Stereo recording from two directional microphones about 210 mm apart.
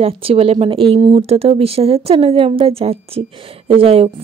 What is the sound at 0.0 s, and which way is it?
Speech, 25° right (ahead or behind).